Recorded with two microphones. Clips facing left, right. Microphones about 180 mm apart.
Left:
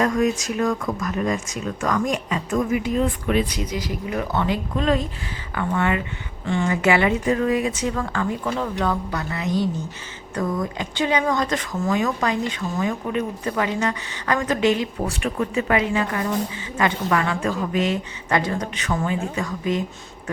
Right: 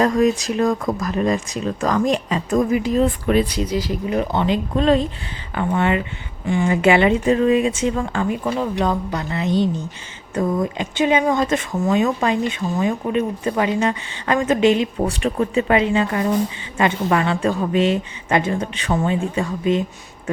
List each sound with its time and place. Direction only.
0.0 s speech: 35° right (ahead or behind)
6.4 s a woman's voice: 15° right (ahead or behind)
6.7 s speech: 25° right (ahead or behind)